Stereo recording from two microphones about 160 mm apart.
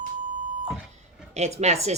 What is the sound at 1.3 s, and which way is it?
Speech, 45° right (ahead or behind).